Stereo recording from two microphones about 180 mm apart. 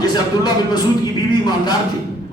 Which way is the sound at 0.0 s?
25° left (ahead or behind).